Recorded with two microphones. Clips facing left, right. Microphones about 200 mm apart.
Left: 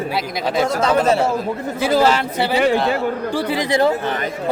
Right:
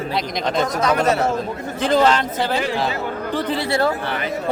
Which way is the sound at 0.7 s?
30° left (ahead or behind).